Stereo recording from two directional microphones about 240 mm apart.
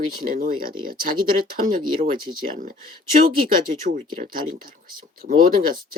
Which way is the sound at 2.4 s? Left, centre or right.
Right.